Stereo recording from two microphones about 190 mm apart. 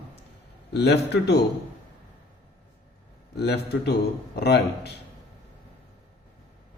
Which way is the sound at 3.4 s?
60° left (ahead or behind).